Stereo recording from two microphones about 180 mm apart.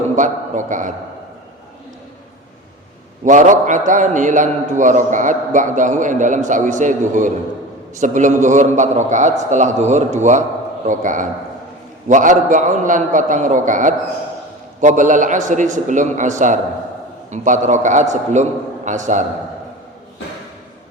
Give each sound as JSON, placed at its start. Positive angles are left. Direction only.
{"t": 0.2, "sound": "a man's voice", "side_deg": -45}
{"t": 3.2, "sound": "a man's voice", "side_deg": -45}